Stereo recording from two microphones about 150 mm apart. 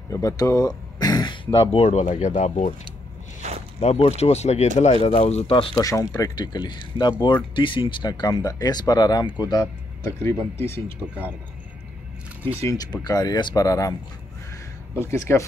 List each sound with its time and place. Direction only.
0.1 s speech: 20° left (ahead or behind); by 2.7 s 50° left (ahead or behind)
3.8 s speech: 45° left (ahead or behind)
5.8 s speech: 25° left (ahead or behind)
11.0 s speech: 5° right (ahead or behind)
12.6 s speech: 25° left (ahead or behind)
15.0 s speech: 15° left (ahead or behind)